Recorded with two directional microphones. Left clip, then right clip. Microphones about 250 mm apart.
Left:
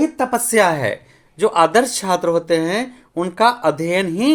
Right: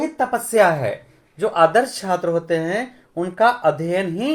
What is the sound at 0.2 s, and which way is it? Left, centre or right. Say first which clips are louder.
Speech: right 2 dB; left.